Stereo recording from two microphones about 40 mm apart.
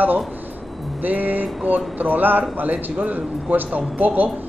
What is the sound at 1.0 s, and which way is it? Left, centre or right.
Speech, right.